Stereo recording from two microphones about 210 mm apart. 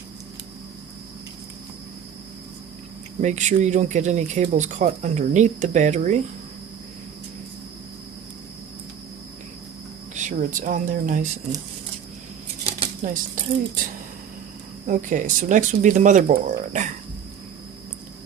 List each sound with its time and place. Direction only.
3.2 s speech: 35° right (ahead or behind)
10.2 s speech: 35° right (ahead or behind)
13.0 s speech: 35° right (ahead or behind)
14.8 s speech: 40° right (ahead or behind)